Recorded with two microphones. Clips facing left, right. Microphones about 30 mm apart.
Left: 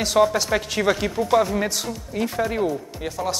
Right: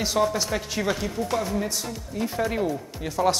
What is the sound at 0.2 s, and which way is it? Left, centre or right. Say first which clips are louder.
Speech: left 6 dB; left.